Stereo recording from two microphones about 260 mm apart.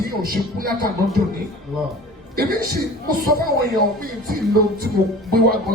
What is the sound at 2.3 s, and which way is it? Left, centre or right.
Speech, right.